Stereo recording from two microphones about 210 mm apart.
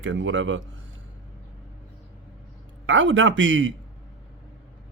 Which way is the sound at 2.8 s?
65° right (ahead or behind).